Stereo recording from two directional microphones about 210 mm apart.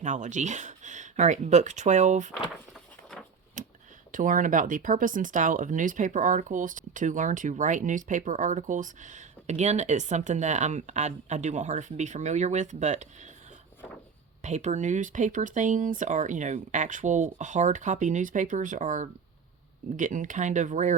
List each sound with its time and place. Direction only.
0.0 s speech: 35° right (ahead or behind)
3.6 s a sound: 35° right (ahead or behind)
4.1 s speech: 40° right (ahead or behind)
14.4 s speech: 35° right (ahead or behind)